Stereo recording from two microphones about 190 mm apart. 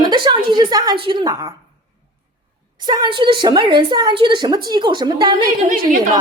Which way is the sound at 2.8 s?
25° right (ahead or behind).